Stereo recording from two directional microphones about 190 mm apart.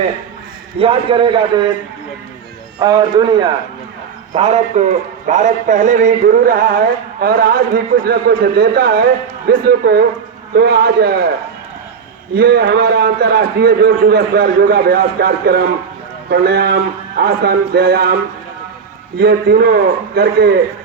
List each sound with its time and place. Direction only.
0.8 s a man's voice: 25° right (ahead or behind)
2.7 s a man's voice: 20° right (ahead or behind); by 11.3 s 55° right (ahead or behind)
12.3 s a man's voice: 55° right (ahead or behind)